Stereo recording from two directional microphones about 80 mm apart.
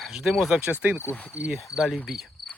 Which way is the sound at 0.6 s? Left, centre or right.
Right.